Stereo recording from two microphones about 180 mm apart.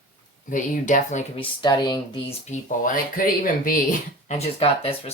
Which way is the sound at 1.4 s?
25° left (ahead or behind).